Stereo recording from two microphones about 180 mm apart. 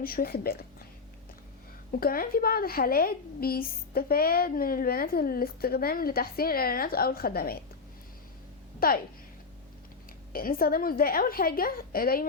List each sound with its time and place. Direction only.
0.0 s a woman's voice: 55° left (ahead or behind)
1.9 s a woman's voice: 55° left (ahead or behind)
8.8 s a woman's voice: 55° left (ahead or behind)
10.3 s a woman's voice: 55° left (ahead or behind)